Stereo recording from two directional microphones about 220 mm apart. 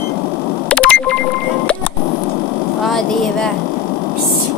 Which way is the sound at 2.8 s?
Centre (ahead or behind).